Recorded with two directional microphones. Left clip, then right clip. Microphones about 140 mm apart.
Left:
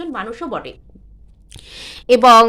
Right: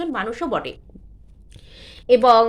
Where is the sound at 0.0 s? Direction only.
10° right (ahead or behind).